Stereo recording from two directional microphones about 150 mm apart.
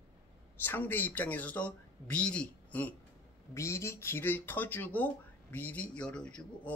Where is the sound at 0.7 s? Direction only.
10° left (ahead or behind).